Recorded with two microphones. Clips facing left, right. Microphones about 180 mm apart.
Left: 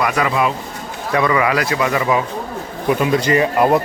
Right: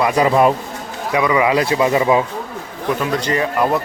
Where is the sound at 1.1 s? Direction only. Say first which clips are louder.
Right 1 dB; 15° right (ahead or behind).